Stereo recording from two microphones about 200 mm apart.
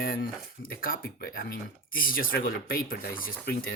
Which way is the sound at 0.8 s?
45° left (ahead or behind).